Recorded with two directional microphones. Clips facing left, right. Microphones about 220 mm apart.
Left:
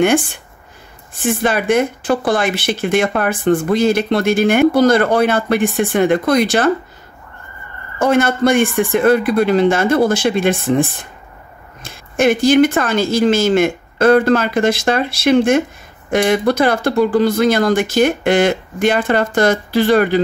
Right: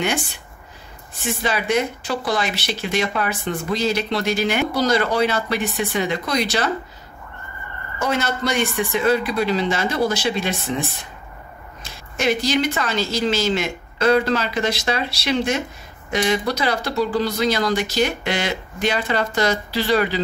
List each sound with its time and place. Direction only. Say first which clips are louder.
0.0 s speech: left 10 dB; 50° left (ahead or behind)
8.0 s speech: left 9 dB; 50° left (ahead or behind)